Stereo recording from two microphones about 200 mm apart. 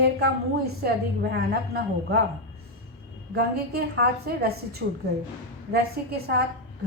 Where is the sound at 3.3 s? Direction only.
50° right (ahead or behind).